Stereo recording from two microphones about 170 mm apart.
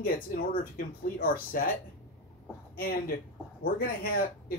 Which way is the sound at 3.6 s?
60° left (ahead or behind).